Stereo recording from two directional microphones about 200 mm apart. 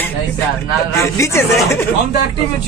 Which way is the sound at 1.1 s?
15° left (ahead or behind).